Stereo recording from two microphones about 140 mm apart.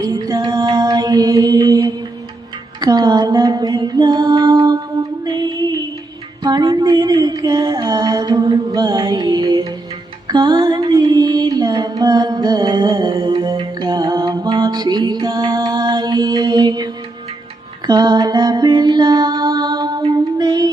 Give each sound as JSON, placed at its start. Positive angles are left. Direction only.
{"t": 0.0, "sound": "mantra", "side_deg": -25}
{"t": 2.8, "sound": "a sound", "side_deg": -30}
{"t": 5.2, "sound": "music", "side_deg": -30}
{"t": 6.4, "sound": "a sound", "side_deg": -30}
{"t": 10.2, "sound": "female singing", "side_deg": -30}
{"t": 14.3, "sound": "music", "side_deg": -30}